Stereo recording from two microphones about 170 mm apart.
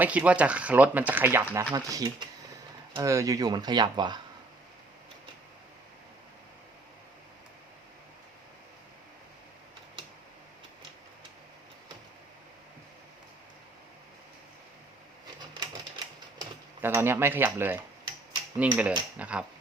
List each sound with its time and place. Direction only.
0.0 s speech: 10° right (ahead or behind); by 4.2 s 25° right (ahead or behind)
15.4 s typewriter: 25° right (ahead or behind)
16.4 s speech: 15° right (ahead or behind)